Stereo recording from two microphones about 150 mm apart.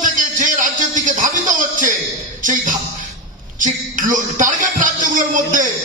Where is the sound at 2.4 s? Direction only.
60° right (ahead or behind).